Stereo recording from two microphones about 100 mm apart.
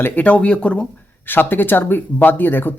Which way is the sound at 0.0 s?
15° left (ahead or behind).